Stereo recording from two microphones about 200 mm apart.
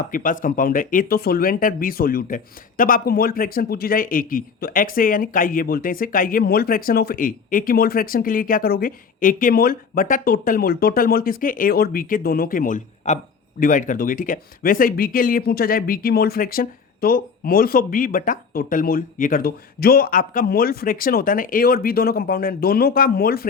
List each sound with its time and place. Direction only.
0.1 s speech: 40° left (ahead or behind)